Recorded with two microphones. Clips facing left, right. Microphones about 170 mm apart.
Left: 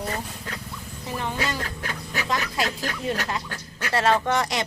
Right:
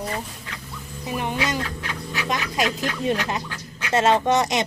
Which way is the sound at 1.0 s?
15° right (ahead or behind).